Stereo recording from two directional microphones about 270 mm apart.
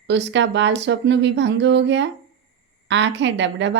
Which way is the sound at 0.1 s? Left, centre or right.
Right.